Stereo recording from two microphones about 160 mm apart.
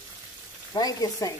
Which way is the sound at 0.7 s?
25° left (ahead or behind).